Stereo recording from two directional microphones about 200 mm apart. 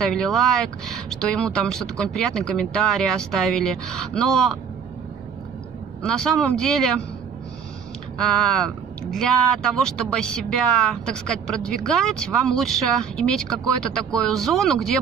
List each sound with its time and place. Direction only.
0.0 s speech: 5° left (ahead or behind)
6.0 s speech: 5° left (ahead or behind)
8.2 s speech: 5° left (ahead or behind)